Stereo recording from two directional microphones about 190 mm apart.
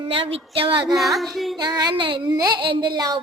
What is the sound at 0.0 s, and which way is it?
Speech, 30° right (ahead or behind).